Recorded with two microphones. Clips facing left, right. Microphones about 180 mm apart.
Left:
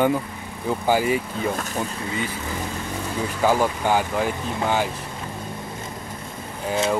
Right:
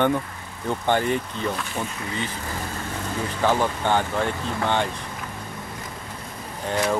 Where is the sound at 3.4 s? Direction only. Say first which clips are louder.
Left 2 dB; 10° left (ahead or behind).